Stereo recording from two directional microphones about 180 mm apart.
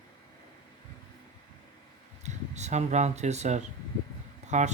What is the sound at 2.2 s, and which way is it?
Speech, 40° right (ahead or behind).